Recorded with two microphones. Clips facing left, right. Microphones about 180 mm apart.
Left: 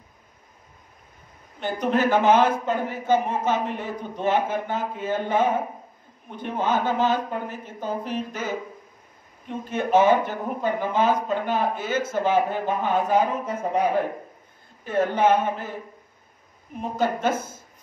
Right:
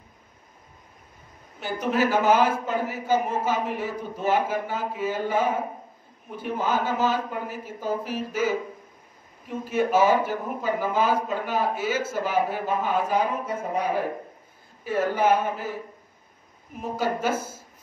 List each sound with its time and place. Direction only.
1.6 s a man's voice: 5° right (ahead or behind)
14.9 s a man's voice: 10° right (ahead or behind)
16.9 s a man's voice: 10° right (ahead or behind)